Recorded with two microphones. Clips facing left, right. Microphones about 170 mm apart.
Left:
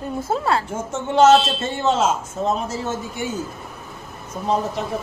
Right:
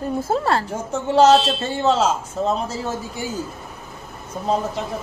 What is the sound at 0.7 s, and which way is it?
A man's voice, 35° right (ahead or behind).